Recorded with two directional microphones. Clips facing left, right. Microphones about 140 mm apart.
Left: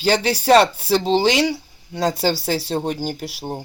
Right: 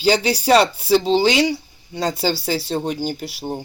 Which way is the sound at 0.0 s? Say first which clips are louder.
Right 1 dB; 5° right (ahead or behind).